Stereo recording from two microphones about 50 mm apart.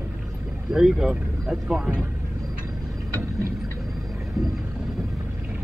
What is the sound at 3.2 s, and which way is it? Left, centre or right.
Vehicle, right.